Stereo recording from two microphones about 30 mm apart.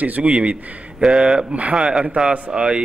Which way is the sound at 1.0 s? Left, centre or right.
Right.